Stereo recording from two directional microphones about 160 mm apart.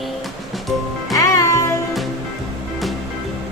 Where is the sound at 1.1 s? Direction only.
20° left (ahead or behind).